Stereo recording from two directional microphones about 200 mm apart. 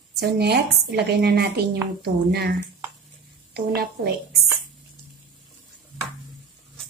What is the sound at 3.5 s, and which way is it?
Speech, 55° right (ahead or behind).